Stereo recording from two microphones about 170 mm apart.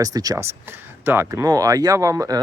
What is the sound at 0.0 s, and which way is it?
Speech, 20° right (ahead or behind).